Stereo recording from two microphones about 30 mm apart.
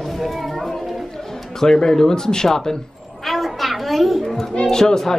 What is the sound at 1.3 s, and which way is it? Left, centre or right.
Speech, centre.